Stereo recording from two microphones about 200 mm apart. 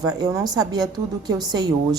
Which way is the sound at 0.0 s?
15° right (ahead or behind).